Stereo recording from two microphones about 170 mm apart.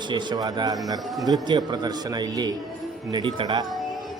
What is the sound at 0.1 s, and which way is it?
A man's voice, 25° right (ahead or behind).